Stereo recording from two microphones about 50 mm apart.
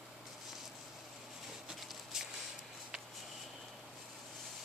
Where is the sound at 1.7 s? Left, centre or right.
Centre.